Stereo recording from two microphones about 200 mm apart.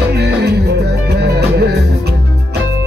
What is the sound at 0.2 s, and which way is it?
Music, 55° right (ahead or behind).